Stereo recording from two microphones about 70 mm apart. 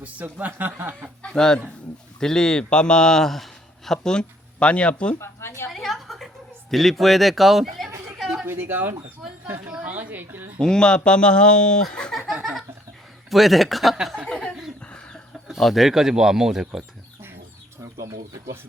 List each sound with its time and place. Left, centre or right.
0.0 s speech: right
1.2 s a man's voice: centre
5.2 s a woman's voice: left
5.6 s a sound: centre
6.7 s speech: centre
8.4 s speech: right
9.6 s speech: centre
10.6 s speech: centre
12.3 s a sound: centre
13.3 s speech: centre
14.3 s a sound: centre
14.8 s chicken: centre
15.4 s speech: centre